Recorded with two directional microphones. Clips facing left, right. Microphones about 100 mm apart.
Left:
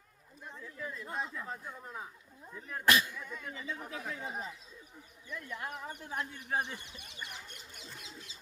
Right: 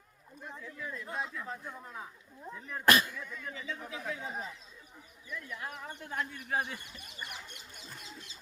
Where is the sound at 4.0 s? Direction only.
Centre (ahead or behind).